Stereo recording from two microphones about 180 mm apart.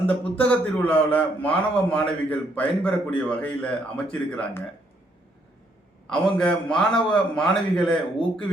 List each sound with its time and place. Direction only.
0.0 s a man's voice: 10° left (ahead or behind)
6.1 s a man's voice: 5° left (ahead or behind)